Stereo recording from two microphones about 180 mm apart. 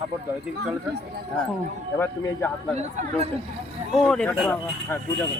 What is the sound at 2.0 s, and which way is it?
Speech, 10° left (ahead or behind).